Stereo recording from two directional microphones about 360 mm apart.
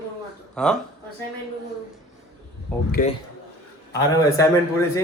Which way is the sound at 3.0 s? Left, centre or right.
Left.